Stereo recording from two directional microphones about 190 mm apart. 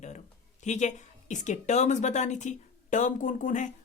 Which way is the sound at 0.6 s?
40° left (ahead or behind).